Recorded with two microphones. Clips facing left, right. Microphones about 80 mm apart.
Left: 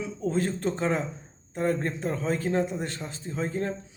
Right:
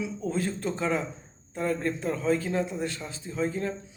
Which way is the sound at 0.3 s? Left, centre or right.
Left.